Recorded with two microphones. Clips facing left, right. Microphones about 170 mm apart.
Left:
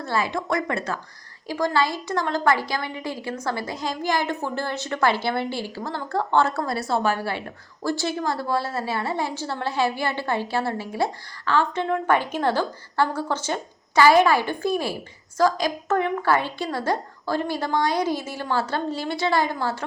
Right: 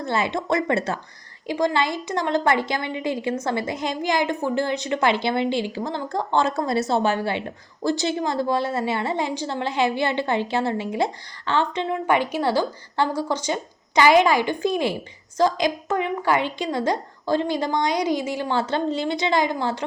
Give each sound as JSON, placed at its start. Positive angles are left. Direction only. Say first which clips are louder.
{"t": 0.0, "sound": "a woman's voice", "louder": "right 1 dB", "side_deg": -25}